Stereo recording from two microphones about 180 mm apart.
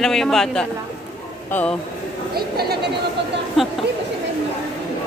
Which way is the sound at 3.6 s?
Centre (ahead or behind).